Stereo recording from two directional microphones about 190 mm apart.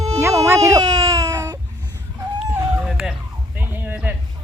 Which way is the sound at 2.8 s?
5° right (ahead or behind).